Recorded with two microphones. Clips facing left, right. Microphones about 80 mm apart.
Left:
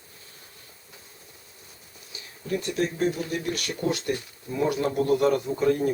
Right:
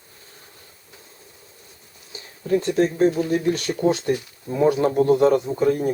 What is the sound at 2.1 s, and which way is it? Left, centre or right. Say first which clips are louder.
Speech: right 8 dB; right.